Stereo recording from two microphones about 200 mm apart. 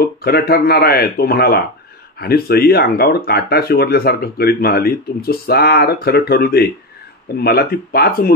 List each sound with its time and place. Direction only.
0.0 s speech: 50° left (ahead or behind)